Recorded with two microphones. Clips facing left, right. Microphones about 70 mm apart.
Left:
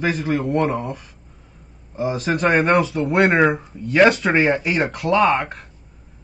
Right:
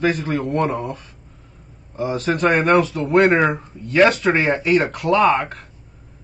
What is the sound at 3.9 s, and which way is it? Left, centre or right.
Speech, centre.